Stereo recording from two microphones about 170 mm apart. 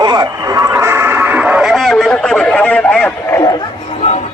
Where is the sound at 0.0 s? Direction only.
25° right (ahead or behind); by 3.6 s 15° left (ahead or behind).